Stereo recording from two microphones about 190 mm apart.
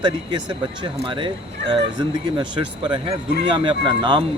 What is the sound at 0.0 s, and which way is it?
Speech, 25° right (ahead or behind).